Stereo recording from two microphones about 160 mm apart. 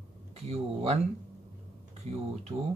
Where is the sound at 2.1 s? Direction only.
40° right (ahead or behind).